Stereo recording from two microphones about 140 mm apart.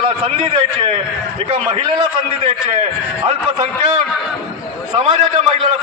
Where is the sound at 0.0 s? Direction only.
40° right (ahead or behind).